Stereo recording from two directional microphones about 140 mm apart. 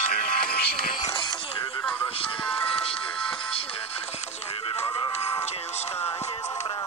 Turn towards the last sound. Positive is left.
turn(degrees=30)  # may be behind; listen again after turning